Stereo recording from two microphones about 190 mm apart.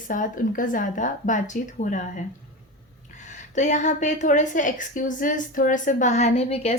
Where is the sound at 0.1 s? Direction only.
45° left (ahead or behind).